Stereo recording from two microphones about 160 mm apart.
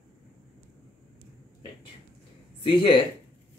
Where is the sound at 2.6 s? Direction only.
30° left (ahead or behind).